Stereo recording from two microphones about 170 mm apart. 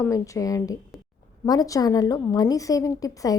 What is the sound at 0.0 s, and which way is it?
A woman's voice, 20° left (ahead or behind).